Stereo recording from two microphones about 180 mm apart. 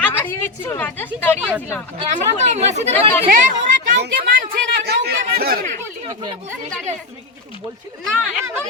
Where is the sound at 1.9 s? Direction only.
40° right (ahead or behind).